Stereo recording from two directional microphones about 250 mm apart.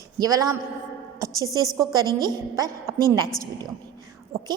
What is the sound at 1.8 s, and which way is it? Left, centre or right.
A woman's voice, centre.